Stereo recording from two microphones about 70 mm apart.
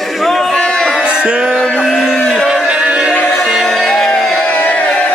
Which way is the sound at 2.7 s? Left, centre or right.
Centre.